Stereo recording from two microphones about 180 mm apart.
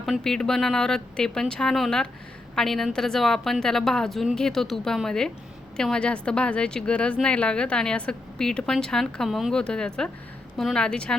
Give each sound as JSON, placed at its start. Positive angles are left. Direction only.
{"t": 0.0, "sound": "a woman's voice", "side_deg": 0}